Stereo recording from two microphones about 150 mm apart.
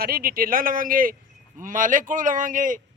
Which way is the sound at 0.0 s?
80° right.